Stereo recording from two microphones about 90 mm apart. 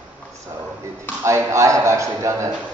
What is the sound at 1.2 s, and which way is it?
A man's voice, 35° right (ahead or behind).